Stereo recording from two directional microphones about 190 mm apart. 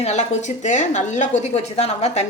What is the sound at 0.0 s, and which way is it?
Speech, 35° left (ahead or behind).